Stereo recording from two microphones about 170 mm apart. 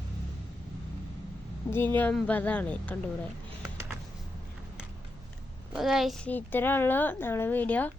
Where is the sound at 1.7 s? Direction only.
15° left (ahead or behind).